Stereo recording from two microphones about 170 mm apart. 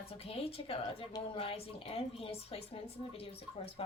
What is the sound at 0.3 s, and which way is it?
A woman's voice, 35° left (ahead or behind).